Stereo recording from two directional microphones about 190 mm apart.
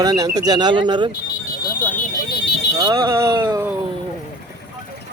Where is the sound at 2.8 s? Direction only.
20° right (ahead or behind).